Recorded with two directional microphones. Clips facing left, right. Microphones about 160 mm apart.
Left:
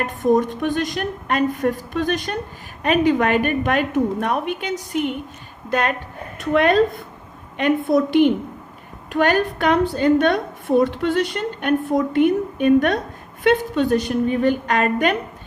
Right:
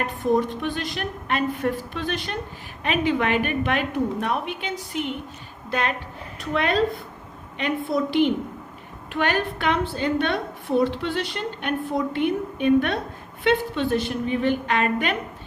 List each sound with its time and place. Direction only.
0.3 s a woman's voice: 50° left (ahead or behind)